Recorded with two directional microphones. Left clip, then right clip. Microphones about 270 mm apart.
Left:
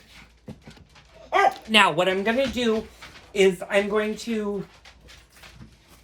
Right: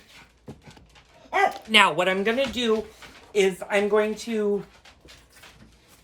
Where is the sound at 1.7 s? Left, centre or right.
Centre.